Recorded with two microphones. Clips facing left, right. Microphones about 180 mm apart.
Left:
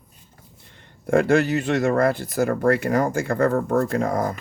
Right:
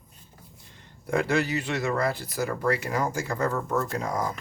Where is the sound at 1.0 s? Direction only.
50° left (ahead or behind).